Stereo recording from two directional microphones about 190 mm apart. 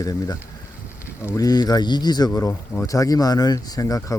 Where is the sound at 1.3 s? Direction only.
20° left (ahead or behind).